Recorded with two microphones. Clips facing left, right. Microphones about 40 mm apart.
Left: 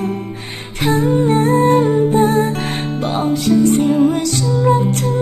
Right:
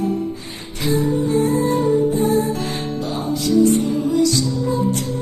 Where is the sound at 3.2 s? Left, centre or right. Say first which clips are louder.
Left 2 dB; left.